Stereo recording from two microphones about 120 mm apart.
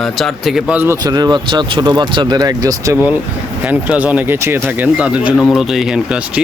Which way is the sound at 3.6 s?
10° right (ahead or behind).